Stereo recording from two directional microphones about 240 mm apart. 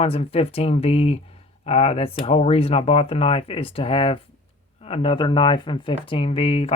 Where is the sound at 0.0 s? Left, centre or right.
Left.